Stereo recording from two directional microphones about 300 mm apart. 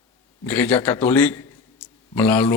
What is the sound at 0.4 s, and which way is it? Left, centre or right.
A man's voice, centre.